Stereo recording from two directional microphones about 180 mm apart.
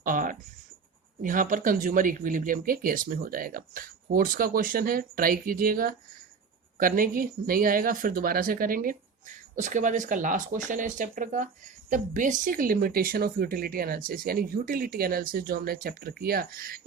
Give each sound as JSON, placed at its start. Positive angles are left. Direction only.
{"t": 0.0, "sound": "speech", "side_deg": -50}